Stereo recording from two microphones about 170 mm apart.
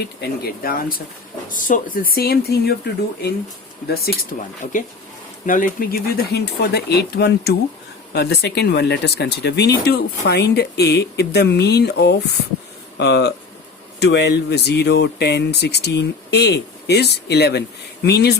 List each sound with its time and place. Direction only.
0.2 s speech: 60° left (ahead or behind)
5.5 s speech: 55° left (ahead or behind); by 18.3 s 75° left (ahead or behind)